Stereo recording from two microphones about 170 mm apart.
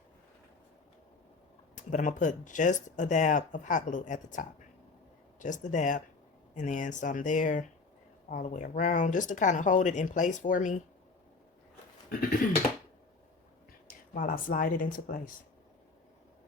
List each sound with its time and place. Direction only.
1.7 s speech: 50° left (ahead or behind)
14.1 s speech: 55° left (ahead or behind)